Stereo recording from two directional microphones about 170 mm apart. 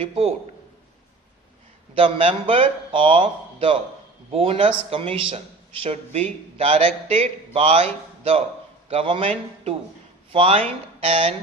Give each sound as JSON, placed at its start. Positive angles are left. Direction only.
{"t": 0.0, "sound": "a man's voice", "side_deg": -35}
{"t": 2.0, "sound": "a man's voice", "side_deg": -30}